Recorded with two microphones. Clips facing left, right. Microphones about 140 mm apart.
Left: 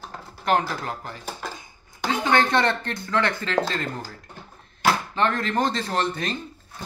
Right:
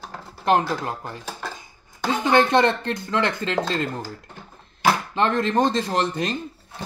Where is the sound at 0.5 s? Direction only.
20° right (ahead or behind).